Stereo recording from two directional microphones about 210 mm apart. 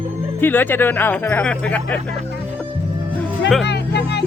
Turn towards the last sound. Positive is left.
turn(degrees=55)  # may be behind; listen again after turning